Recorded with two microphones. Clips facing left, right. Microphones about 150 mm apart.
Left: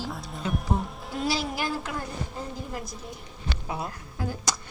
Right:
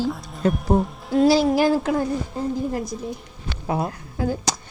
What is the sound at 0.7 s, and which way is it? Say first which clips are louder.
Speech: right 11 dB; 45° right (ahead or behind).